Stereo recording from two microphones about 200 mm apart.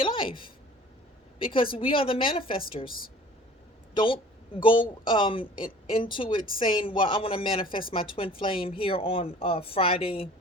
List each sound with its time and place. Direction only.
0.0 s a woman's voice: 25° left (ahead or behind)
3.9 s a woman's voice: 25° left (ahead or behind)